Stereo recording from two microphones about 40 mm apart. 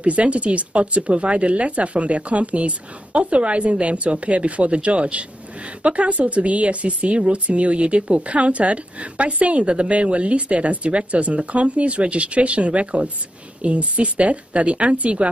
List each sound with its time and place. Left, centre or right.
0.0 s speech: right